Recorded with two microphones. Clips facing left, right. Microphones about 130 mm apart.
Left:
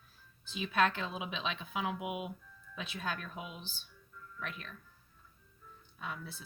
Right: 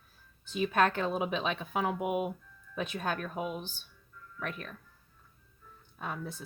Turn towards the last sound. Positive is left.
turn(degrees=-45)  # may be behind; listen again after turning